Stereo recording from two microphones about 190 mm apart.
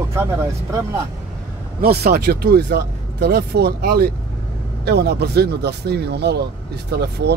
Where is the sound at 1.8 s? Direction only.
55° right (ahead or behind).